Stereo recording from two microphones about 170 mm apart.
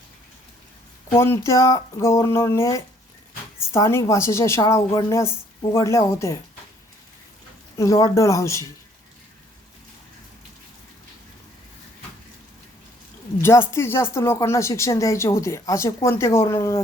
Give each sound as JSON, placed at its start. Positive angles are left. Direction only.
{"t": 1.2, "sound": "speech", "side_deg": 15}
{"t": 7.8, "sound": "speech", "side_deg": 20}
{"t": 13.4, "sound": "speech", "side_deg": 15}